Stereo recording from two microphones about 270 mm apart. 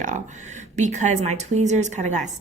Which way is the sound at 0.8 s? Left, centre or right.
Right.